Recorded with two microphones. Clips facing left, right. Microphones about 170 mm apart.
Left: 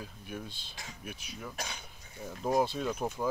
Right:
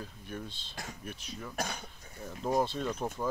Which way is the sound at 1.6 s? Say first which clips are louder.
Right 9 dB; 45° right (ahead or behind).